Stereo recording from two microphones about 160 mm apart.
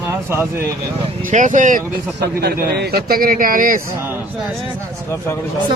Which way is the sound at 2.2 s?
80° right.